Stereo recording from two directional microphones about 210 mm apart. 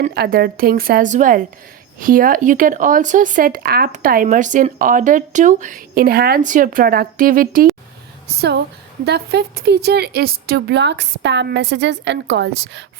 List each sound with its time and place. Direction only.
0.0 s a woman's voice: 45° right (ahead or behind)
8.4 s a woman's voice: 55° right (ahead or behind)